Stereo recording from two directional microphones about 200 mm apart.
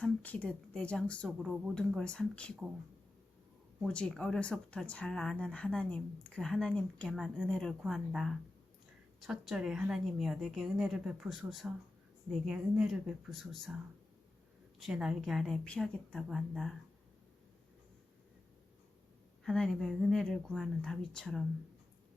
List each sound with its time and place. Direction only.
0.0 s speech: 5° left (ahead or behind)
3.8 s speech: 5° left (ahead or behind)
14.8 s speech: centre (ahead or behind)
19.5 s speech: centre (ahead or behind)